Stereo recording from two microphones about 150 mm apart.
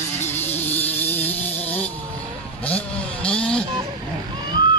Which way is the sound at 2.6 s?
10° left (ahead or behind).